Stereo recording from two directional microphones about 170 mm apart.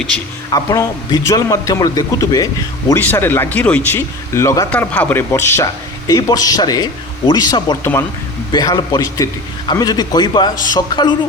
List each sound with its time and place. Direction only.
0.5 s a man's voice: 20° left (ahead or behind)